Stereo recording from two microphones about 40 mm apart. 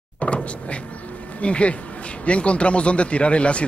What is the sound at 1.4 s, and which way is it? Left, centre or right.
Speech, left.